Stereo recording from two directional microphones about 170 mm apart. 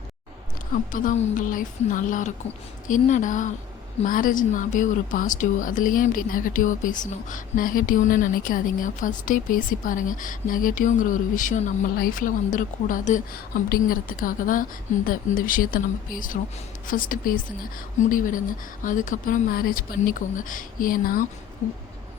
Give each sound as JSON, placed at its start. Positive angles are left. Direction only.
{"t": 0.7, "sound": "a woman's voice", "side_deg": 55}